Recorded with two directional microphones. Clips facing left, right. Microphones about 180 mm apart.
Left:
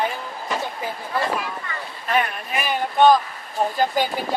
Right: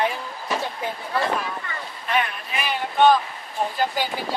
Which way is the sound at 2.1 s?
45° left (ahead or behind).